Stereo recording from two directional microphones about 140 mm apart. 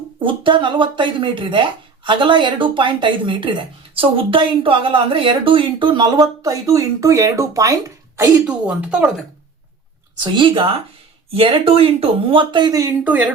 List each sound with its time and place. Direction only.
0.2 s speech: 35° right (ahead or behind); by 8.3 s 20° right (ahead or behind)
8.4 s speech: 10° right (ahead or behind)
10.3 s speech: 35° right (ahead or behind)